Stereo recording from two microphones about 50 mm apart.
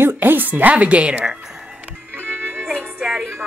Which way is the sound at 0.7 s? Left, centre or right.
Right.